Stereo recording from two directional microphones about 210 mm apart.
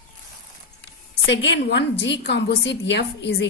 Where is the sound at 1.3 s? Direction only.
60° left (ahead or behind).